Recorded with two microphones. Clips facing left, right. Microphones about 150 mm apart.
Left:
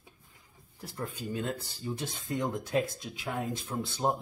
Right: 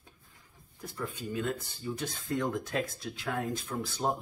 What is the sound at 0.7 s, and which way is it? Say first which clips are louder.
Speech: even; 35° left (ahead or behind).